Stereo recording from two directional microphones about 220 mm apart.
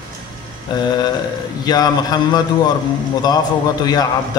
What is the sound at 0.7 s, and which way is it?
Speech, 20° left (ahead or behind).